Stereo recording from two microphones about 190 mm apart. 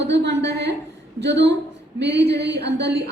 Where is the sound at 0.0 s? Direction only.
65° right (ahead or behind).